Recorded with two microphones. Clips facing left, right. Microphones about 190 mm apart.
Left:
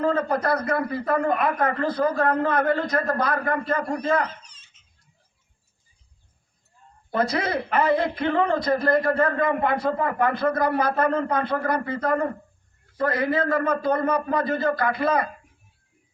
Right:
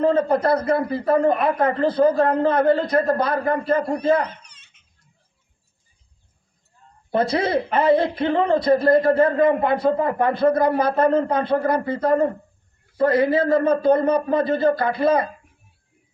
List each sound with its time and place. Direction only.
0.0 s a man's voice: 30° right (ahead or behind)
4.3 s giggle: 60° right (ahead or behind)
7.1 s a man's voice: 30° right (ahead or behind)